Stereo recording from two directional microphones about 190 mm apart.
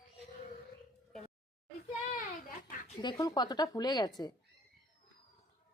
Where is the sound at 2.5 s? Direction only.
45° left (ahead or behind).